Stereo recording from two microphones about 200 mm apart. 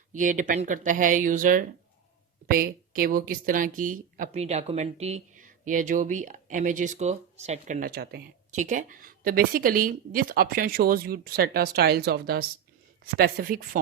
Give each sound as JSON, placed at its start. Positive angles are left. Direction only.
{"t": 0.1, "sound": "speech", "side_deg": -40}